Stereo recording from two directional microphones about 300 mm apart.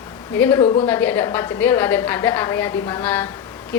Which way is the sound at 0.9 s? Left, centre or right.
Centre.